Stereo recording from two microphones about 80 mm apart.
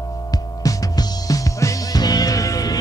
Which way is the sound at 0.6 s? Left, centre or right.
Left.